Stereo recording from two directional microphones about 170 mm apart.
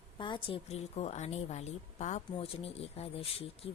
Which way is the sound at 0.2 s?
30° left (ahead or behind).